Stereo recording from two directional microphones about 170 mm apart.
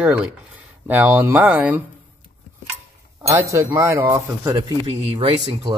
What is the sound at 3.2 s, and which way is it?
Speech, 20° right (ahead or behind).